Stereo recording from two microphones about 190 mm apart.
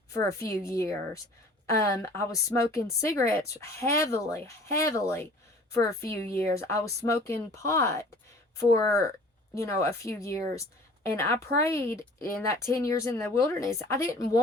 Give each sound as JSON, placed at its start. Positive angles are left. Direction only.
{"t": 0.1, "sound": "speech", "side_deg": 15}